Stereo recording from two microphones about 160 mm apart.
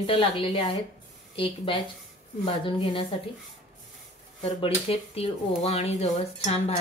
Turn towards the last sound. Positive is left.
turn(degrees=40)  # may be behind; listen again after turning